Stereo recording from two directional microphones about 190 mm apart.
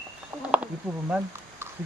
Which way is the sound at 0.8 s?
Centre (ahead or behind).